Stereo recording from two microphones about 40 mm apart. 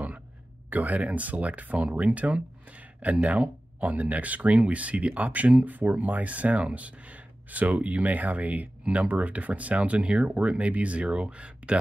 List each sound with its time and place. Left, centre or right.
0.7 s speech: right